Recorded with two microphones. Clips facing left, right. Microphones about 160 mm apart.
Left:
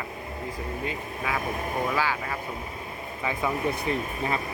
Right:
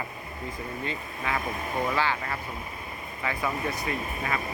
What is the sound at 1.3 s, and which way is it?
Speech, 10° left (ahead or behind).